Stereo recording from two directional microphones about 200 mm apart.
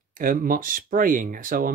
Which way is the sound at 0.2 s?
45° right (ahead or behind).